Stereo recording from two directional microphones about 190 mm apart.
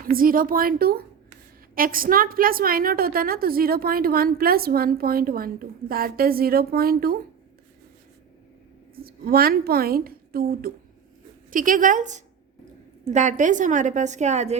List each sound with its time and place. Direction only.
0.0 s a woman's voice: 50° right (ahead or behind)
9.0 s a woman's voice: 50° right (ahead or behind); by 14.6 s 35° right (ahead or behind)